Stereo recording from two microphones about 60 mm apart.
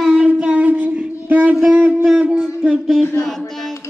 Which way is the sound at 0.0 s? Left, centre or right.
Centre.